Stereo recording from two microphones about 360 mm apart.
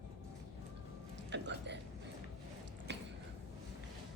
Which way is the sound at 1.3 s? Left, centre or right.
Right.